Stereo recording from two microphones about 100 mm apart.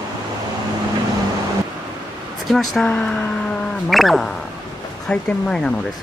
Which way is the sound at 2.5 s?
Centre (ahead or behind).